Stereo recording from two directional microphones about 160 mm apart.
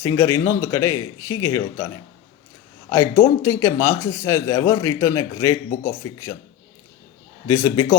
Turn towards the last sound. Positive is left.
turn(degrees=20)  # may be behind; listen again after turning